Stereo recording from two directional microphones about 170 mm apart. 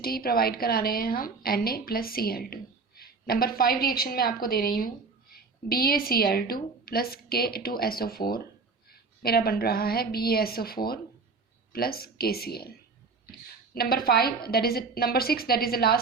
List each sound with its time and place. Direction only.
0.0 s a woman's voice: 60° left (ahead or behind)
13.7 s a woman's voice: 60° left (ahead or behind)